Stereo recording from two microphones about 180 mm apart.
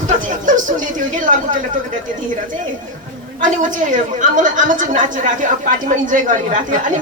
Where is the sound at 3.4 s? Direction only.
45° right (ahead or behind).